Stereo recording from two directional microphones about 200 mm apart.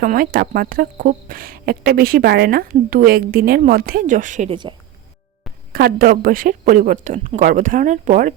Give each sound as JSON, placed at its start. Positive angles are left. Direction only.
{"t": 0.0, "sound": "speech", "side_deg": -45}
{"t": 5.7, "sound": "speech", "side_deg": -45}